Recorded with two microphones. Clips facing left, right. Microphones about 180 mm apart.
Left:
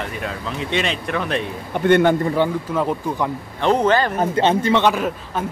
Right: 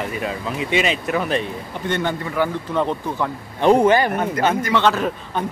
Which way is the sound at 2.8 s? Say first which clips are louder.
Right 1 dB; 5° left (ahead or behind).